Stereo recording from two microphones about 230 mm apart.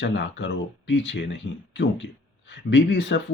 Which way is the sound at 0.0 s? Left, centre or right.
Left.